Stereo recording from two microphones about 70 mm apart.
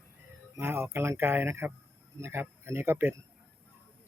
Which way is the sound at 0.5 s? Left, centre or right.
Right.